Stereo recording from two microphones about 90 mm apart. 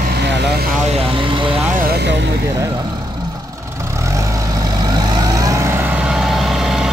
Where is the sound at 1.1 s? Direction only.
70° right (ahead or behind).